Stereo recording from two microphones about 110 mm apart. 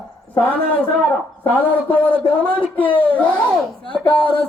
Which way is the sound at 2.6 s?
15° left (ahead or behind).